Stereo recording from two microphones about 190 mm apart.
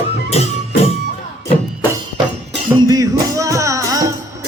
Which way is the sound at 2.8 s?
20° right (ahead or behind).